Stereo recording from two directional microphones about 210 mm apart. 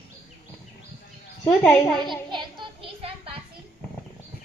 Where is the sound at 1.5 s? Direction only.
10° left (ahead or behind).